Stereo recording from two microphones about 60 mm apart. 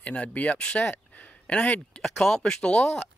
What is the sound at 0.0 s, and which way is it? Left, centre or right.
Speech, left.